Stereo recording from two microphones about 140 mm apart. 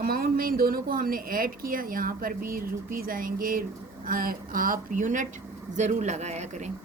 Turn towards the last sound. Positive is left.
turn(degrees=-55)  # may be behind; listen again after turning